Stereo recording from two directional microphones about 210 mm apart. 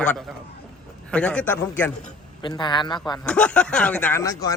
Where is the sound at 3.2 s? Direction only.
5° left (ahead or behind).